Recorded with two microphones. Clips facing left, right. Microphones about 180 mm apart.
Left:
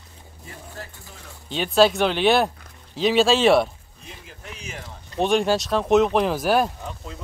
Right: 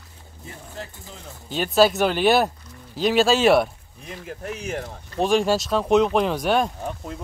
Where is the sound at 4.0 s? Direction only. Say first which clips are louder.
Right 9 dB; 60° right (ahead or behind).